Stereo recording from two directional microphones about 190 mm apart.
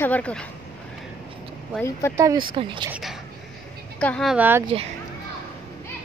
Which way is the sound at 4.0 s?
5° left (ahead or behind).